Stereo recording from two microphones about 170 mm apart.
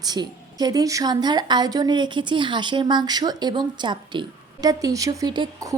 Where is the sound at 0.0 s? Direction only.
25° right (ahead or behind).